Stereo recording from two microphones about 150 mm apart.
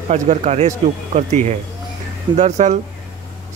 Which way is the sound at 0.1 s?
50° right (ahead or behind).